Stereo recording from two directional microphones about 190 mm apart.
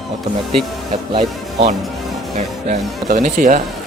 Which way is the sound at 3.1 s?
40° right (ahead or behind).